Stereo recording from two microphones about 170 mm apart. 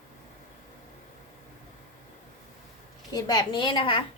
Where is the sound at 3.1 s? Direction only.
20° left (ahead or behind).